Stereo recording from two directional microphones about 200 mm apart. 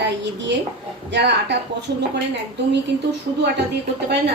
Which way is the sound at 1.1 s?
60° right (ahead or behind).